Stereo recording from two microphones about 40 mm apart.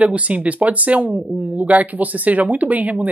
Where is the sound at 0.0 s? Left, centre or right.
Right.